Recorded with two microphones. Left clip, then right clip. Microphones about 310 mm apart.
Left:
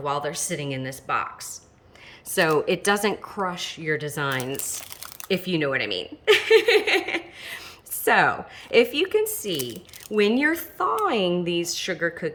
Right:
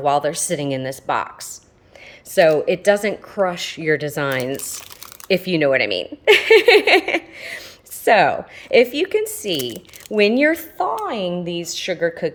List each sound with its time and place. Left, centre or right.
0.0 s speech: centre
2.3 s a woman's voice: centre